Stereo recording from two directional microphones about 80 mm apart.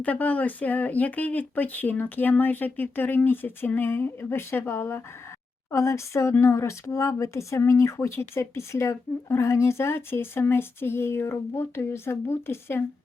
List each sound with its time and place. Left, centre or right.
0.0 s speech: centre